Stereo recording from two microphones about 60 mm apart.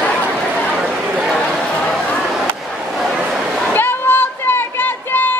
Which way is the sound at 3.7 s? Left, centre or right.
Left.